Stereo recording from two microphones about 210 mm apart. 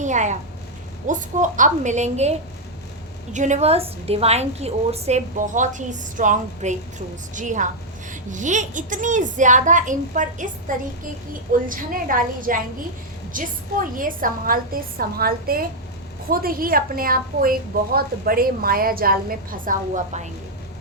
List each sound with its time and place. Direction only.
0.0 s a woman's voice: 35° right (ahead or behind)
3.3 s a woman's voice: 35° right (ahead or behind)
11.7 s a woman's voice: 40° right (ahead or behind)